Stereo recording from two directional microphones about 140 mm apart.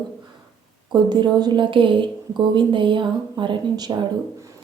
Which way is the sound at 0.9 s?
30° right (ahead or behind).